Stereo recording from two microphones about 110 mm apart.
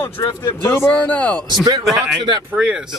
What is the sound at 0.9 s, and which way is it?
Speech, 10° left (ahead or behind).